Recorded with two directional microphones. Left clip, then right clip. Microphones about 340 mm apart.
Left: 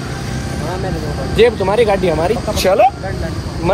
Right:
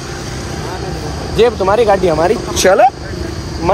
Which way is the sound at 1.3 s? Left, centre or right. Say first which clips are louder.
Right 1 dB; centre.